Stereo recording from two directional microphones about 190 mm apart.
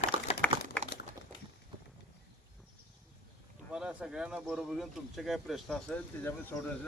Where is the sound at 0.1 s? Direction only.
30° right (ahead or behind).